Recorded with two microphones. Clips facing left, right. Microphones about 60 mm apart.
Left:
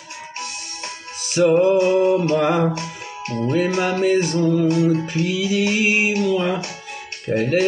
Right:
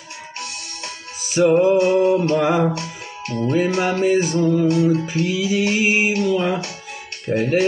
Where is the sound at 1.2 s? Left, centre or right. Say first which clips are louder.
Even; centre.